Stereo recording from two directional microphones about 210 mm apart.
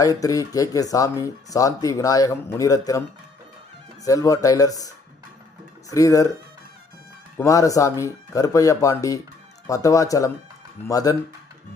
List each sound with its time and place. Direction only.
0.0 s speech: 15° left (ahead or behind)
4.0 s speech: 15° left (ahead or behind)
5.9 s speech: 15° left (ahead or behind)
7.3 s speech: 15° left (ahead or behind)